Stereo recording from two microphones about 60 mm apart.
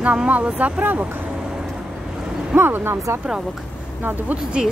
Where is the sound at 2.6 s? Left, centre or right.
Right.